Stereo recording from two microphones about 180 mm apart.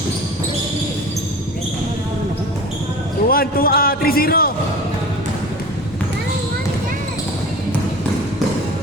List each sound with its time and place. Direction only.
3.2 s a man's voice: 55° left (ahead or behind)